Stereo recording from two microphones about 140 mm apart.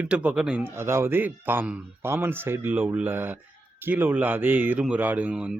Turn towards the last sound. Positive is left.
turn(degrees=-5)  # may be behind; listen again after turning